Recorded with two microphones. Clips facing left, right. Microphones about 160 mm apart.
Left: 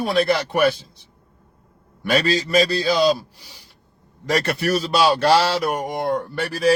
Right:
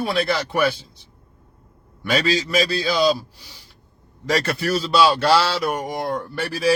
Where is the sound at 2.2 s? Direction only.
40° left (ahead or behind).